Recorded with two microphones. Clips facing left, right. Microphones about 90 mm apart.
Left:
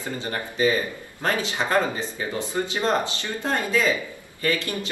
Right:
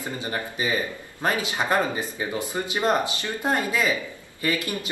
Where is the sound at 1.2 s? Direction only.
15° right (ahead or behind).